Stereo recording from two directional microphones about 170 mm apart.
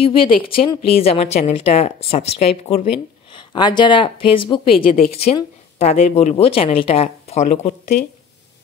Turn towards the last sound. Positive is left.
turn(degrees=45)  # may be behind; listen again after turning